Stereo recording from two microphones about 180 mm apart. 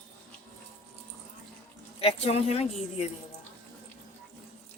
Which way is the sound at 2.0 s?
35° left (ahead or behind).